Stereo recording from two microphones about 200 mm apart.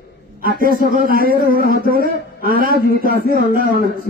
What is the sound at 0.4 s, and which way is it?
A man's voice, 45° right (ahead or behind).